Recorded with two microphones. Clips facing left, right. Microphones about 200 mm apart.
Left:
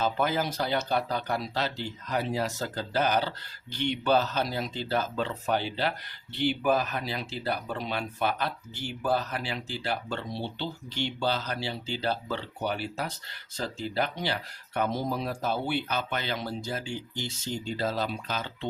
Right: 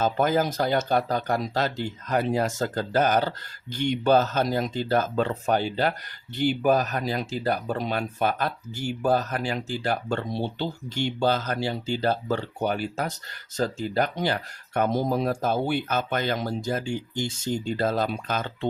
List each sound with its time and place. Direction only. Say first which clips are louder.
0.0 s speech: right 5 dB; 45° right (ahead or behind)